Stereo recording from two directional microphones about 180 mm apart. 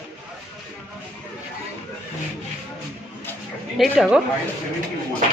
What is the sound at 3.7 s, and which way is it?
Speech, centre (ahead or behind).